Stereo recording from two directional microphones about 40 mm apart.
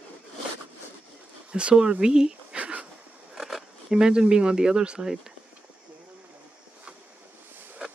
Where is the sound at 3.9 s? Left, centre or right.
Centre.